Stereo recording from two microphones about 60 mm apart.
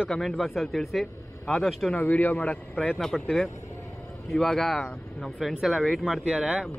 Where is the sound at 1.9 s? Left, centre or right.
Left.